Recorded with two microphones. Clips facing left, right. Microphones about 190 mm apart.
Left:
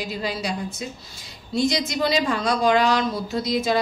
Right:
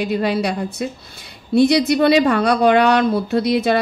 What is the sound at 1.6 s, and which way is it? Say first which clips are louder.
A woman's voice: right 9 dB; 60° right (ahead or behind).